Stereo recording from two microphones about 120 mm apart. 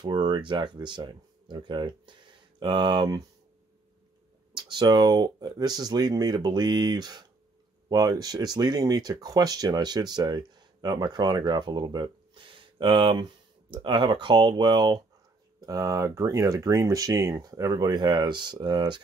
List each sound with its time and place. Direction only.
0.0 s speech: 35° right (ahead or behind)
4.6 s speech: 40° right (ahead or behind)